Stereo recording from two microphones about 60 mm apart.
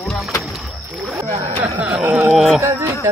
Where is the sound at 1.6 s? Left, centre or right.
Right.